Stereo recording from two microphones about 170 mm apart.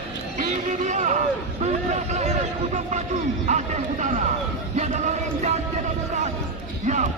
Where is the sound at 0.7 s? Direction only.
45° right (ahead or behind).